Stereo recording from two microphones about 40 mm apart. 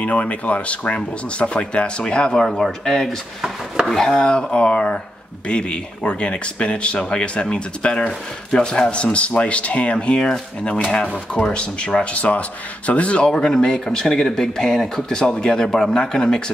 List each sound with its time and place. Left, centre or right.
0.0 s speech: left; by 2.4 s centre
2.4 s speech: centre; by 13.3 s left
13.3 s speech: centre